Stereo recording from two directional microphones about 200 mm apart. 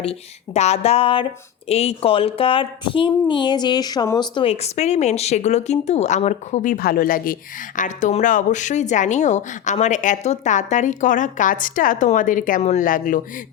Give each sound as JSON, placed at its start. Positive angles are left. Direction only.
{"t": 0.0, "sound": "speech", "side_deg": 30}